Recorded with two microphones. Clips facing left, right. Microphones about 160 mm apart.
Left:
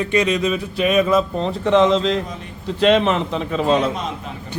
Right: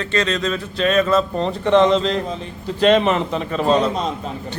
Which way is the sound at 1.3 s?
Centre (ahead or behind).